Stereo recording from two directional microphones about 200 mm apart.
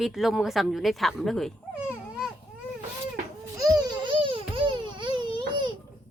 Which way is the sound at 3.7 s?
20° right (ahead or behind).